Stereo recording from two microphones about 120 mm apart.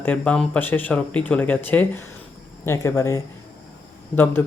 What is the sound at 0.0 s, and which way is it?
Speech, 10° left (ahead or behind).